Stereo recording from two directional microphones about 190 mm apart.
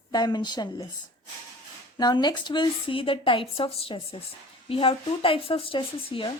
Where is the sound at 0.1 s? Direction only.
20° left (ahead or behind).